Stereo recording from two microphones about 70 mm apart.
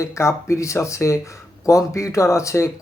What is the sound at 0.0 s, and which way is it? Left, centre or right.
Speech, left.